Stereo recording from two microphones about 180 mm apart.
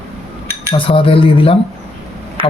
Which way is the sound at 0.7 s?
30° left (ahead or behind).